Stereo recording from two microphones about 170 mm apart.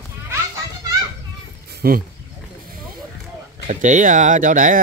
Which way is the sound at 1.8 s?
60° right (ahead or behind).